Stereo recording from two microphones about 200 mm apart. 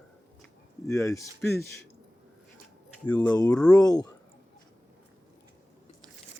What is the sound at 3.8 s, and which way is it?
Speech, 20° left (ahead or behind).